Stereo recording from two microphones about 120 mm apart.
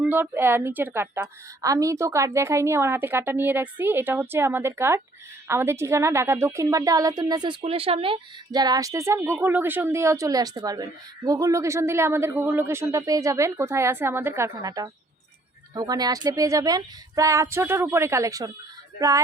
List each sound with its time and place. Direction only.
0.0 s a woman's voice: 15° right (ahead or behind); by 7.5 s 35° right (ahead or behind)
7.6 s speech: 55° right (ahead or behind)
8.5 s a woman's voice: 35° right (ahead or behind)